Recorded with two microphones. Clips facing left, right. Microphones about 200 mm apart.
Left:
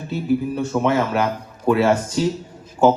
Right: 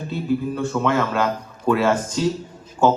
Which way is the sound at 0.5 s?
25° left (ahead or behind).